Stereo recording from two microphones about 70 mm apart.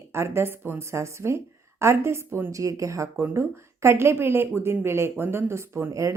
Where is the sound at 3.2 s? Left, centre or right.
Right.